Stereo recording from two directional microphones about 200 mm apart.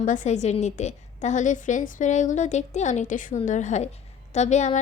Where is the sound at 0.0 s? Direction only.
40° left (ahead or behind).